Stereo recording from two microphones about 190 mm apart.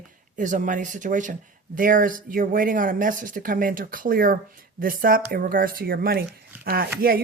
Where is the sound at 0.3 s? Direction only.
40° right (ahead or behind).